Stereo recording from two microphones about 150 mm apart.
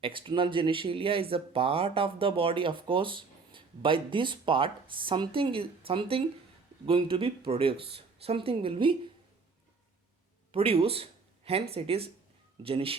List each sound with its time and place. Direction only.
0.0 s speech: 35° right (ahead or behind)
10.5 s speech: 40° right (ahead or behind)